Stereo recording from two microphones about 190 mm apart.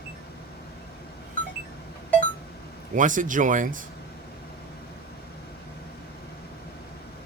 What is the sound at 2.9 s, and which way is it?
Speech, 45° right (ahead or behind).